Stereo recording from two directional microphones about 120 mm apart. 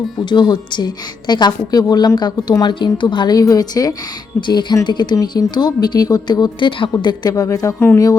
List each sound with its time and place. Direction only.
0.3 s a woman's voice: 40° left (ahead or behind); by 8.1 s 20° left (ahead or behind)